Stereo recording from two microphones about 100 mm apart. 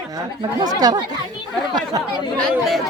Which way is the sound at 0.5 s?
40° right (ahead or behind).